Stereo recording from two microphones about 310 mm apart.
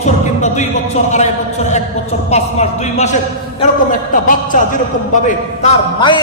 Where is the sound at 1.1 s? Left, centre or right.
Left.